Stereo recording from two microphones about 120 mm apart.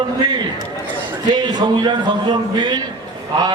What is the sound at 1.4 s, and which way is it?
A man's voice, 35° right (ahead or behind).